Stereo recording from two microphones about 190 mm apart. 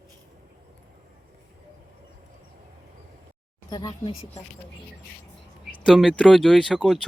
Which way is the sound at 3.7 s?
20° left (ahead or behind).